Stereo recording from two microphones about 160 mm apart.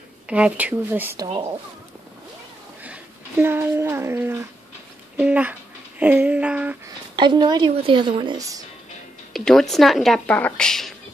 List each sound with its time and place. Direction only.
0.3 s speech: 10° right (ahead or behind)
2.8 s speech: 10° right (ahead or behind)
7.2 s a woman's voice: 30° right (ahead or behind)
9.3 s speech: 5° left (ahead or behind)